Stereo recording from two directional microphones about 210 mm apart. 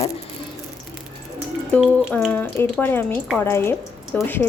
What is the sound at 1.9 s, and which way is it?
A woman's voice, 10° left (ahead or behind).